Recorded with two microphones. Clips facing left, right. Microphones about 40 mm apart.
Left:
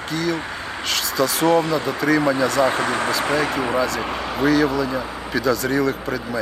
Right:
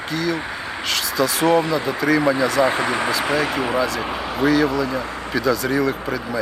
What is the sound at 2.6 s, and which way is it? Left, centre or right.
Speech, right.